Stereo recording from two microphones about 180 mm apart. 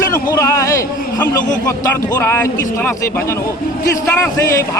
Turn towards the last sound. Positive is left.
turn(degrees=15)  # may be behind; listen again after turning